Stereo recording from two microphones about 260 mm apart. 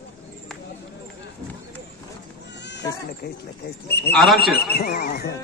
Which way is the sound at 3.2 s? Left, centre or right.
Left.